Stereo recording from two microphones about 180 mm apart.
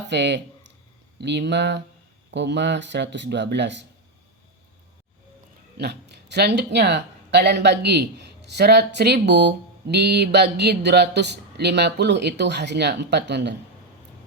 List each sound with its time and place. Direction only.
0.1 s speech: 75° right (ahead or behind)
5.7 s speech: 65° right (ahead or behind)